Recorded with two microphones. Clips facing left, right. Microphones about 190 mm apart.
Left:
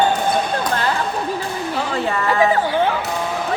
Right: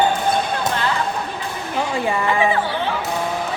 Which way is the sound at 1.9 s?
15° right (ahead or behind).